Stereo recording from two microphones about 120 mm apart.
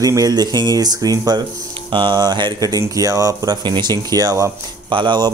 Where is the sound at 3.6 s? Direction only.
40° right (ahead or behind).